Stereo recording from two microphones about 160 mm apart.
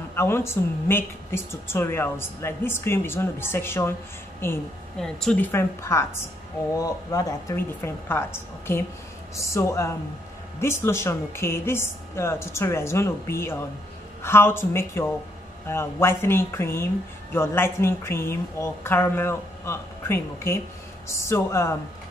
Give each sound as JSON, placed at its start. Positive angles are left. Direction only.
{"t": 0.1, "sound": "speech", "side_deg": 15}
{"t": 5.0, "sound": "speech", "side_deg": 5}